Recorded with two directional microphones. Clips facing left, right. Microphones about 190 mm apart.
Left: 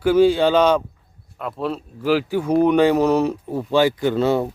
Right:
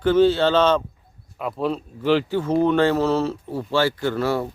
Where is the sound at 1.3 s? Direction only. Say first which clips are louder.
Right 1 dB; centre (ahead or behind); by 4.5 s 20° left (ahead or behind).